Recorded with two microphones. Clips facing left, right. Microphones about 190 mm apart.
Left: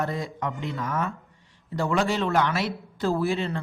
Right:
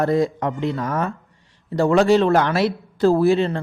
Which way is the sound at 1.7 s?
70° right (ahead or behind).